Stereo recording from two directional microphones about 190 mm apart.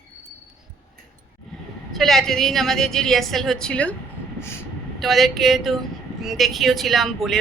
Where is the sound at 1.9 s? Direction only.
Centre (ahead or behind).